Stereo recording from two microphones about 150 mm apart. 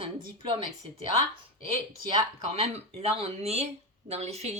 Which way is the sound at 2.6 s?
45° right (ahead or behind).